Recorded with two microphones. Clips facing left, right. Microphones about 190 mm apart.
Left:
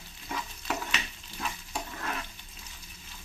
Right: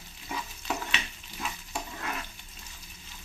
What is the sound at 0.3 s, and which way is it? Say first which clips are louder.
Stir: even; 10° right (ahead or behind).